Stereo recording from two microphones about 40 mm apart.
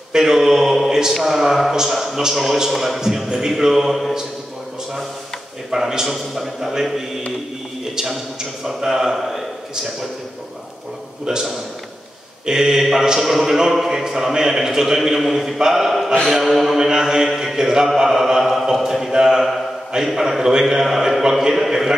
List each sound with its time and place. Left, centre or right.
0.1 s a sound: centre
1.2 s a man's voice: centre
5.7 s a man's voice: centre
7.9 s a man's voice: centre
11.2 s a man's voice: centre
16.3 s a sound: centre
16.7 s a man's voice: centre
18.9 s a sound: centre
19.1 s a man's voice: centre